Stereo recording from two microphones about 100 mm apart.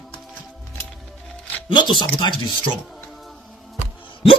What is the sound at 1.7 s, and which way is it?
Speech, 50° left (ahead or behind).